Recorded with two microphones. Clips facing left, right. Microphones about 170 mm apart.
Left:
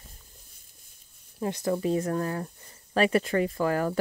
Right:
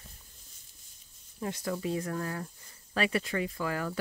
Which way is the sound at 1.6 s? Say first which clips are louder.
Left 7 dB; 40° left (ahead or behind).